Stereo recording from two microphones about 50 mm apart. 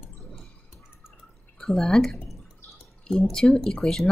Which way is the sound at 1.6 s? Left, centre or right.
Centre.